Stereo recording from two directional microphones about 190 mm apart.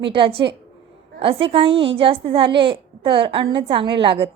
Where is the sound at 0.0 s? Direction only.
30° right (ahead or behind).